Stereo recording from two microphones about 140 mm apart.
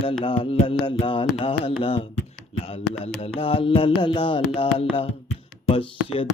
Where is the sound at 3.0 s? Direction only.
45° left (ahead or behind).